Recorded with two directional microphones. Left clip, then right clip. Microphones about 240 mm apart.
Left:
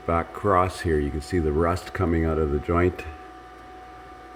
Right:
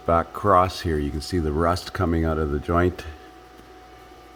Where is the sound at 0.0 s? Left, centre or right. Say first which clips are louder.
Right 3 dB; centre.